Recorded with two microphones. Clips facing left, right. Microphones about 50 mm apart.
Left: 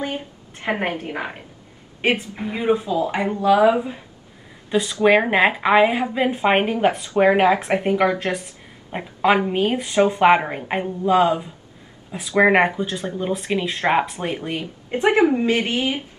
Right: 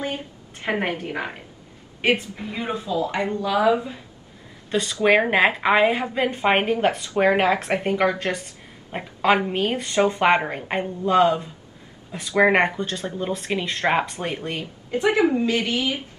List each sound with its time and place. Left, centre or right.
0.0 s a sound: left
2.2 s a woman's voice: left
3.1 s speech: centre
4.6 s a woman's voice: centre
13.8 s a woman's voice: centre
14.6 s a woman's voice: left